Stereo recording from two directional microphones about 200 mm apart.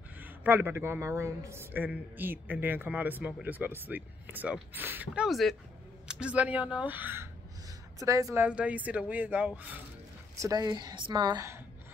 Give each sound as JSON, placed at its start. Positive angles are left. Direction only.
{"t": 0.2, "sound": "a man's voice", "side_deg": -10}